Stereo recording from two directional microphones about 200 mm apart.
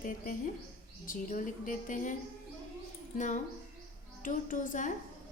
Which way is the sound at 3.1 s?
40° left (ahead or behind).